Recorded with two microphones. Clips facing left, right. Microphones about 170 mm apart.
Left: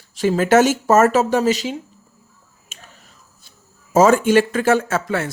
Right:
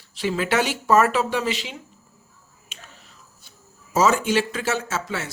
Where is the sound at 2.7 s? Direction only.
45° left (ahead or behind).